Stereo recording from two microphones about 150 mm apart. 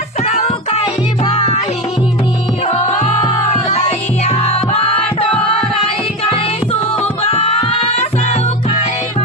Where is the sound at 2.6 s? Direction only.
50° left (ahead or behind).